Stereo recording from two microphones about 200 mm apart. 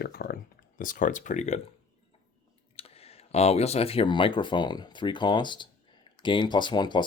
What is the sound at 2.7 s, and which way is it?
Speech, 30° left (ahead or behind).